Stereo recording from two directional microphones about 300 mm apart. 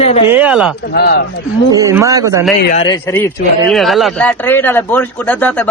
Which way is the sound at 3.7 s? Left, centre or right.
Centre.